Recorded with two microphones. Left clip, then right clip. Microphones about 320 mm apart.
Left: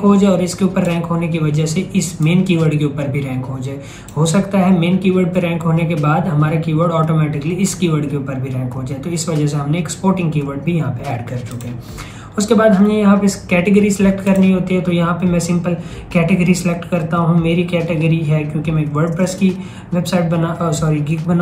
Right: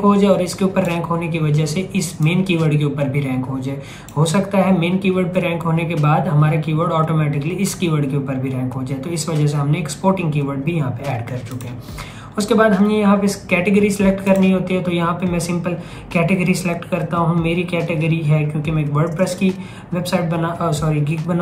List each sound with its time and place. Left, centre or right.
0.0 s speech: centre
12.4 s speech: centre